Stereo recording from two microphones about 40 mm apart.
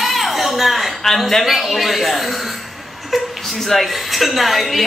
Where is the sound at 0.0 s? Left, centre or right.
Centre.